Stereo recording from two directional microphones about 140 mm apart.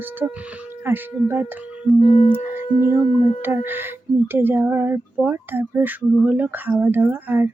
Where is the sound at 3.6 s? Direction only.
15° right (ahead or behind).